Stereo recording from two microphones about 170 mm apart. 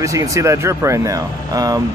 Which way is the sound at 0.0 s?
20° right (ahead or behind).